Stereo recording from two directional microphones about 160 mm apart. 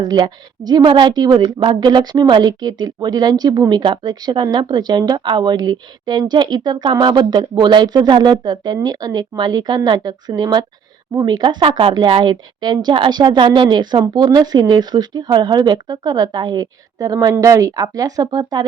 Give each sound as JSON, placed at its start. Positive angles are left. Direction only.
{"t": 0.0, "sound": "a woman's voice", "side_deg": -25}